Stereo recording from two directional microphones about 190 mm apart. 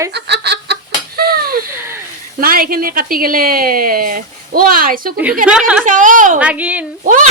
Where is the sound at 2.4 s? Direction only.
50° right (ahead or behind).